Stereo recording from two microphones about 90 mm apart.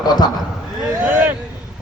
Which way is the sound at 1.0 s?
20° right (ahead or behind).